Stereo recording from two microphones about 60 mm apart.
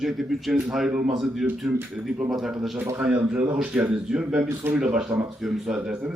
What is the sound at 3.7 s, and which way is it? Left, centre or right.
Speech, right.